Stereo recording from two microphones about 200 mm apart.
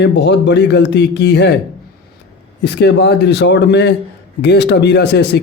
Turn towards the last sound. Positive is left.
turn(degrees=60)  # may be behind; listen again after turning